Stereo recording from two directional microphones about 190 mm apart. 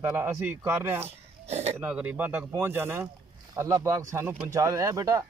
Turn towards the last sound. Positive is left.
turn(degrees=-15)  # may be behind; listen again after turning